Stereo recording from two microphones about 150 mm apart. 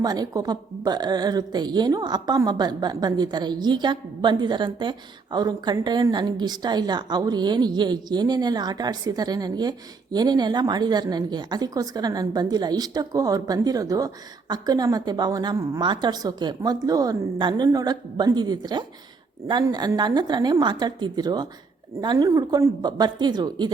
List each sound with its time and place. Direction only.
0.0 s a woman's voice: 25° right (ahead or behind)